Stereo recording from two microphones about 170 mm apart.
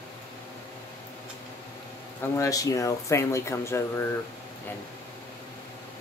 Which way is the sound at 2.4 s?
20° left (ahead or behind).